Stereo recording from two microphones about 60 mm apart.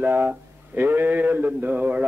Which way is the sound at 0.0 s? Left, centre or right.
Right.